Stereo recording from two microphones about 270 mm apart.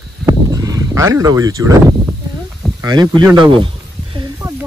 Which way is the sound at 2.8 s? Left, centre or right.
Centre.